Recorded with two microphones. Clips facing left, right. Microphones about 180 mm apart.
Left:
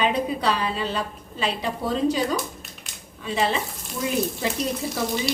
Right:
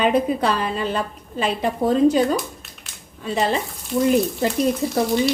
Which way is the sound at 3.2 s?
40° right (ahead or behind).